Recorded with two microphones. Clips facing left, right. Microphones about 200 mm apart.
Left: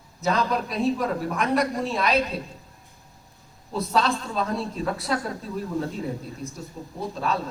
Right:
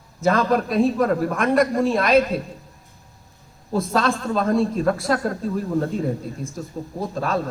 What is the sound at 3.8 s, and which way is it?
Speech, 50° right (ahead or behind).